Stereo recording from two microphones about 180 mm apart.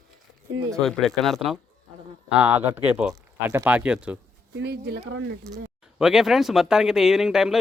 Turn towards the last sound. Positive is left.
turn(degrees=-5)  # may be behind; listen again after turning